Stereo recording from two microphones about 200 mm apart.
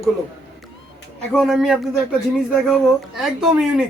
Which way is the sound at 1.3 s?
Centre (ahead or behind).